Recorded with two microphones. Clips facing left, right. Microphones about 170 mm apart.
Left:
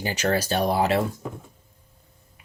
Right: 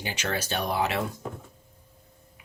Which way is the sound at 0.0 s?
40° left (ahead or behind).